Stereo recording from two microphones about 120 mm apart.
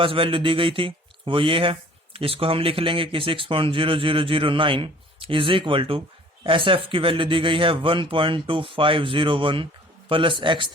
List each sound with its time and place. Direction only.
0.0 s speech: 50° right (ahead or behind)